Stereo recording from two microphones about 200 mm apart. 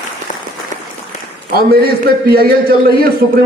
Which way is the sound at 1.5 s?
50° right (ahead or behind).